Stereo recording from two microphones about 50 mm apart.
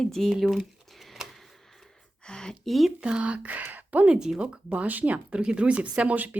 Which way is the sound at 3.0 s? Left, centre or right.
Right.